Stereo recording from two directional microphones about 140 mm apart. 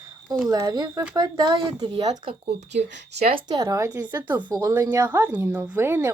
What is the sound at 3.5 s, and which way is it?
A woman's voice, 25° right (ahead or behind).